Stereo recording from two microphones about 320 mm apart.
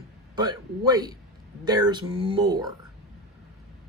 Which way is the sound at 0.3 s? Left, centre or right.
Centre.